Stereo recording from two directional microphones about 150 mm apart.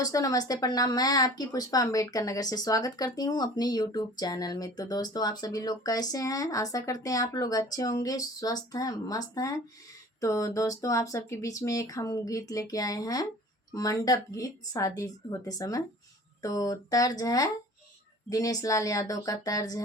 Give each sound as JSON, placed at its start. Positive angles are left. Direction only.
{"t": 0.0, "sound": "speech", "side_deg": 20}